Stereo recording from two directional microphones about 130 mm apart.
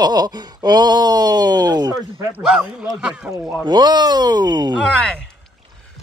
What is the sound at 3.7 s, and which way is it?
Speech, 35° right (ahead or behind).